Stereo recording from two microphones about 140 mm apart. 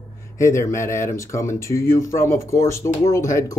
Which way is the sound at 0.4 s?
20° left (ahead or behind).